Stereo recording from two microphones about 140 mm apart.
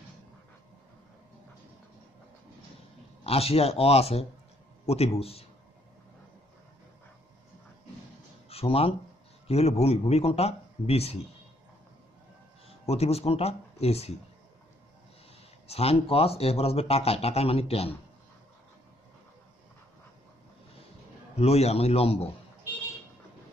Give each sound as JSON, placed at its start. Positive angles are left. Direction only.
{"t": 3.3, "sound": "speech", "side_deg": 45}
{"t": 8.5, "sound": "speech", "side_deg": 45}
{"t": 12.6, "sound": "speech", "side_deg": 50}
{"t": 15.6, "sound": "speech", "side_deg": 45}
{"t": 21.4, "sound": "speech", "side_deg": 50}